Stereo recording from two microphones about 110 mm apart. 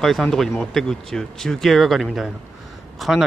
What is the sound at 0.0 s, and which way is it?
A man's voice, 5° left (ahead or behind).